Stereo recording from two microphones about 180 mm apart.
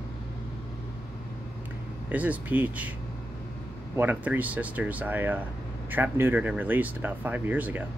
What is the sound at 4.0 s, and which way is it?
Speech, 10° right (ahead or behind).